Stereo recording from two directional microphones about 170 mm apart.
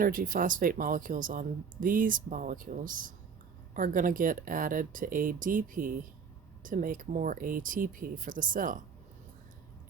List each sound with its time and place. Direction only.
0.0 s speech: 55° right (ahead or behind)